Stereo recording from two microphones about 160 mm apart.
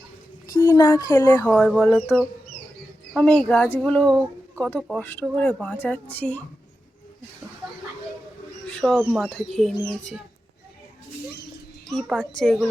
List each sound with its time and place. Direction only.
0.4 s a woman's voice: 20° left (ahead or behind)
8.7 s bird: centre (ahead or behind)
9.1 s speech: centre (ahead or behind)
11.9 s speech: centre (ahead or behind)